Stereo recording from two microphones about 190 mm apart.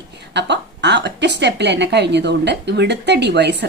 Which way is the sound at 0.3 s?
65° right (ahead or behind).